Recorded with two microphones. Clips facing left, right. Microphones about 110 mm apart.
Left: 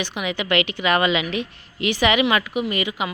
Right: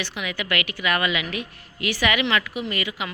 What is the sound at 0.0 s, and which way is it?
A woman's voice, 20° left (ahead or behind).